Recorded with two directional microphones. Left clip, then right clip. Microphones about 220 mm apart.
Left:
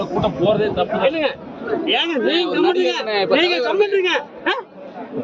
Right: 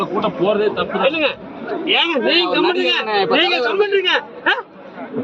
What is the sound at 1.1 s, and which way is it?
A man's voice, 10° left (ahead or behind).